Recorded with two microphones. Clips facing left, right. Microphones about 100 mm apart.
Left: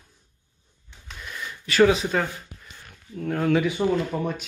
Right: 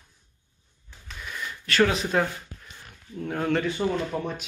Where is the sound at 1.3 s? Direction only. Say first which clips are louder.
Left 1 dB; 5° left (ahead or behind).